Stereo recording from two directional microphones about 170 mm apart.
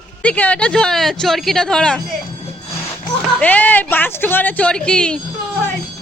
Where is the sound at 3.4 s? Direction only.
10° left (ahead or behind).